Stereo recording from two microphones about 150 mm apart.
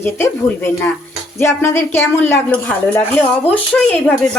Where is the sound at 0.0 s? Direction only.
15° left (ahead or behind).